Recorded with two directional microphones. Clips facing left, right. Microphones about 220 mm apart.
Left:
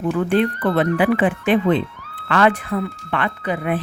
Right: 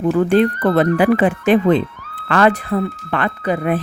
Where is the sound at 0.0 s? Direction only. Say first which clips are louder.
Right 4 dB; 40° right (ahead or behind).